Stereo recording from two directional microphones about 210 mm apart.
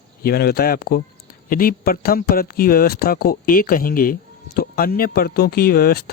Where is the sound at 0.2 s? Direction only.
45° left (ahead or behind).